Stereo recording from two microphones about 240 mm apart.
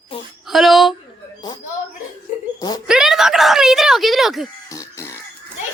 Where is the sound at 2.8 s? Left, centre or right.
Centre.